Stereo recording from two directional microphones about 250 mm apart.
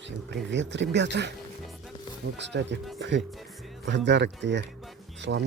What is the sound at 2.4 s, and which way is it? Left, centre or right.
Speech, right.